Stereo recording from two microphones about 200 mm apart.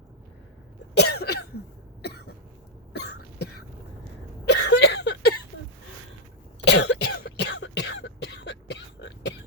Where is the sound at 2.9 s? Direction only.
55° left (ahead or behind).